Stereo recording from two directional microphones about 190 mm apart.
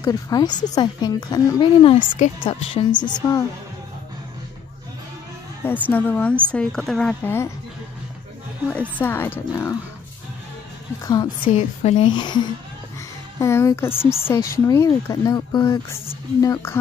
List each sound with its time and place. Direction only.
0.0 s speech: 20° left (ahead or behind)
2.0 s a woman's voice: 40° left (ahead or behind)
2.4 s speech: 25° left (ahead or behind)
5.6 s a woman's voice: 10° left (ahead or behind)
8.9 s speech: 10° left (ahead or behind)
11.1 s speech: 20° left (ahead or behind)
11.5 s a woman's voice: 40° left (ahead or behind)
12.0 s speech: 25° left (ahead or behind)